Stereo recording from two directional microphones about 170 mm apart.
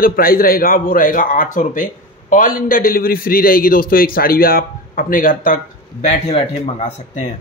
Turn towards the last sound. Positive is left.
turn(degrees=40)  # may be behind; listen again after turning